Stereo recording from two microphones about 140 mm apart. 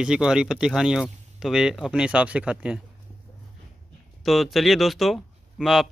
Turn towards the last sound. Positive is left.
turn(degrees=0)  # may be behind; listen again after turning